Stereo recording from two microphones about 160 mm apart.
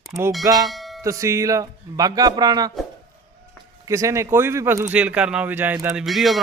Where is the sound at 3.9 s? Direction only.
20° right (ahead or behind).